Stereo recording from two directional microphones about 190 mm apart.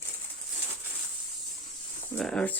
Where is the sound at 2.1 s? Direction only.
Centre (ahead or behind).